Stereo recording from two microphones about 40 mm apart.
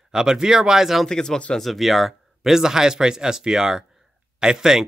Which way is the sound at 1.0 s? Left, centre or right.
Centre.